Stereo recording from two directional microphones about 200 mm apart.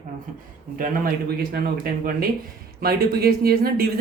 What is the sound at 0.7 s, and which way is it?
Speech, 45° right (ahead or behind).